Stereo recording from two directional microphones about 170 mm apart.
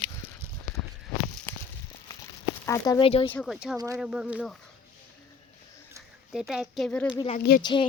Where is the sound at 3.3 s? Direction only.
Centre (ahead or behind).